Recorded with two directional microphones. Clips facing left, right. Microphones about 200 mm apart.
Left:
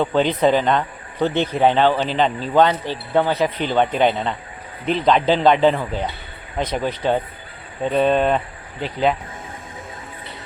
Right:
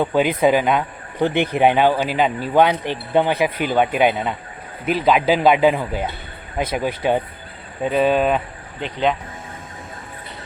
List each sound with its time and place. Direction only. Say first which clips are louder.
0.0 s a man's voice: even; 10° right (ahead or behind)